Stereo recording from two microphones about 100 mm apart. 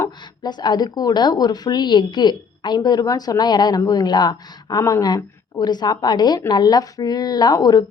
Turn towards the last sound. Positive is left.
turn(degrees=40)  # may be behind; listen again after turning